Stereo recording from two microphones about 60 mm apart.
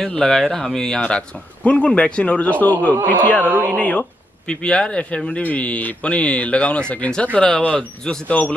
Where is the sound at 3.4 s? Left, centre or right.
Right.